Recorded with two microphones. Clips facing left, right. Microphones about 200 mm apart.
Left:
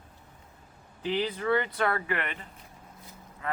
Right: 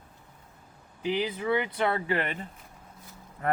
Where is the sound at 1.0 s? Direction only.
15° right (ahead or behind); by 2.5 s 35° right (ahead or behind).